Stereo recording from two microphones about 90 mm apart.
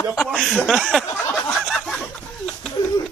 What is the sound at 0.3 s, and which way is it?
Speech, 5° left (ahead or behind).